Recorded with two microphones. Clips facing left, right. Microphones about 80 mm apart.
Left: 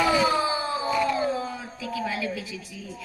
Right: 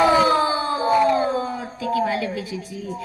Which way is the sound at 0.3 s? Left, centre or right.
Right.